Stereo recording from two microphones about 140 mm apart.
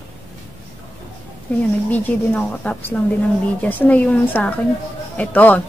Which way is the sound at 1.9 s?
10° left (ahead or behind).